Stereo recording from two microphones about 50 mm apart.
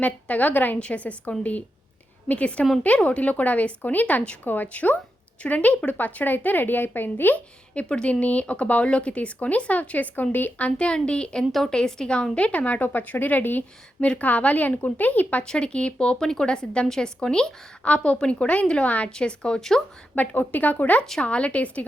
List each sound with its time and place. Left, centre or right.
0.0 s a woman's voice: left
0.8 s a woman's voice: left
7.3 s speech: left
10.8 s a woman's voice: centre
15.4 s speech: left
17.8 s speech: left
18.9 s speech: left
19.1 s speech: centre
20.1 s a woman's voice: left